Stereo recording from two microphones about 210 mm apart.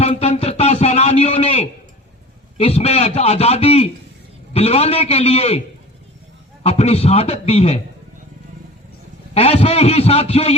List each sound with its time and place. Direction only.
0.0 s a sound: 30° left (ahead or behind)
2.6 s a man's voice: 30° left (ahead or behind)
9.3 s a man's voice: 30° left (ahead or behind)